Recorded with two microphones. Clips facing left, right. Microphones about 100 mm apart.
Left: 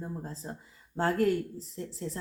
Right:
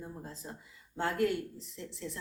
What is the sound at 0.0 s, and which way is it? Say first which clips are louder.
Speech: left 5 dB; 35° left (ahead or behind).